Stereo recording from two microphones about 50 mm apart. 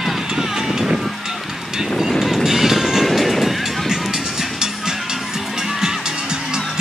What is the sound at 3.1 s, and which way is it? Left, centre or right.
Music, centre.